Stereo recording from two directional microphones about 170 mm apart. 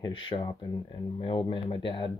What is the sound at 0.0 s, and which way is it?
Speech, 30° left (ahead or behind).